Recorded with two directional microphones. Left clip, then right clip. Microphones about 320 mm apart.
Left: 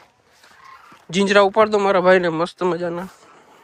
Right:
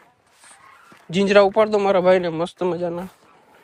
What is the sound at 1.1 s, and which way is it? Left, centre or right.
Speech, centre.